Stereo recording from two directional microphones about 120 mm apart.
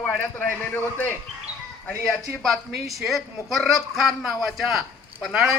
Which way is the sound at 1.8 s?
Centre (ahead or behind).